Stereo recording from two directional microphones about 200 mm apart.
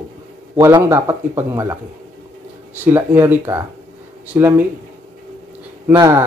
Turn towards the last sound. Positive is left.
turn(degrees=-15)  # may be behind; listen again after turning